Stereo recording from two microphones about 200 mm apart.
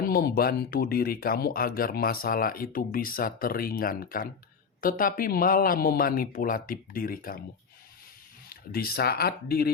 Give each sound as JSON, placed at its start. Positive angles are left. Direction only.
{"t": 0.0, "sound": "speech", "side_deg": 50}
{"t": 8.4, "sound": "speech", "side_deg": 50}